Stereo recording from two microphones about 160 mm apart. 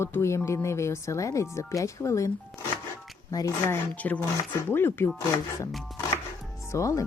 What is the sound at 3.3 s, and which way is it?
Speech, 20° left (ahead or behind).